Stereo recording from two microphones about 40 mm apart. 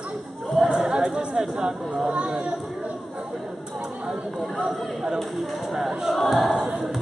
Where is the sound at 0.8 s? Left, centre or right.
Centre.